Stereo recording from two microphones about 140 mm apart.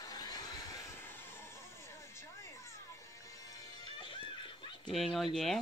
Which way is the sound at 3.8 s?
30° left (ahead or behind).